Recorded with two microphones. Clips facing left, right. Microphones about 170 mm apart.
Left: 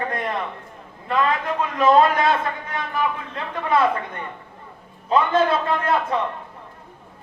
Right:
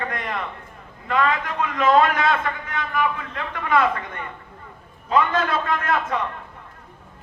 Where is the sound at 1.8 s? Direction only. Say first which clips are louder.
Left 2 dB; 35° left (ahead or behind).